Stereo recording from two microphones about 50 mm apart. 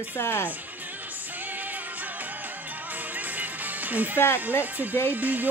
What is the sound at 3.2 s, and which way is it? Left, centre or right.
Music, right.